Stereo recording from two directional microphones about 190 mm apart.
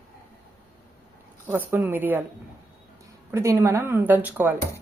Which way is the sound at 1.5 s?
10° right (ahead or behind).